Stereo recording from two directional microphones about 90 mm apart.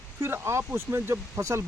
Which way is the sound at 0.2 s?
25° right (ahead or behind).